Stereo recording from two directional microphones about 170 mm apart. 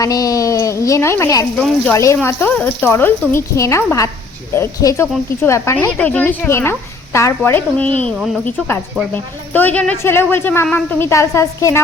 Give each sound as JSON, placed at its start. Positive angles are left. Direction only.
{"t": 0.0, "sound": "a woman's voice", "side_deg": 20}
{"t": 1.5, "sound": "speech", "side_deg": 5}
{"t": 1.9, "sound": "speech", "side_deg": 15}